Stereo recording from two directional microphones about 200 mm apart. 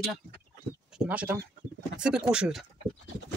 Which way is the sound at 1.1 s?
5° right (ahead or behind).